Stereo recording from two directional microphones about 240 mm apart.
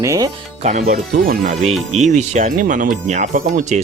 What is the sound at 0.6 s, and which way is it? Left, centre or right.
Speech, right.